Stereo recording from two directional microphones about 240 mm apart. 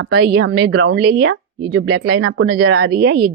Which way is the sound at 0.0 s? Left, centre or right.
Right.